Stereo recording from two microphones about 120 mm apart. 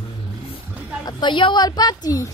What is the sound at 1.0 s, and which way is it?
A woman's voice, 40° left (ahead or behind).